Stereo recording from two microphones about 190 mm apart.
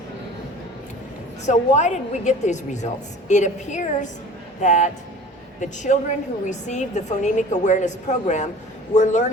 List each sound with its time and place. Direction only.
1.5 s a woman's voice: 40° left (ahead or behind)